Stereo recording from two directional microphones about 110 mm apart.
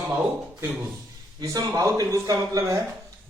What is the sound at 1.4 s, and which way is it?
Speech, 35° right (ahead or behind).